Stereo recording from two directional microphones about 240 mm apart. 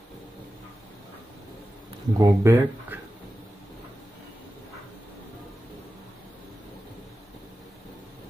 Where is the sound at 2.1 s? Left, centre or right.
Centre.